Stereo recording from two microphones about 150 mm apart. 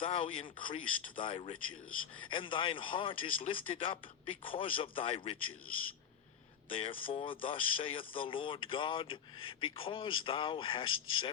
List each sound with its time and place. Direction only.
0.2 s speech: 40° left (ahead or behind)
6.7 s speech: 35° left (ahead or behind)